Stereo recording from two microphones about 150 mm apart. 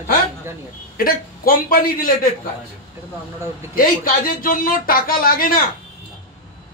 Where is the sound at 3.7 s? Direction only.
75° left (ahead or behind).